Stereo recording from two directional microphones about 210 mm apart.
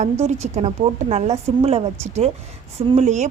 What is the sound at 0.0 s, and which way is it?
A woman's voice, 35° right (ahead or behind).